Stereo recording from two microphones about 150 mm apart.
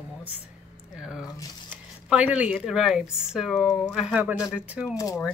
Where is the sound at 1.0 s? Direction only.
5° right (ahead or behind).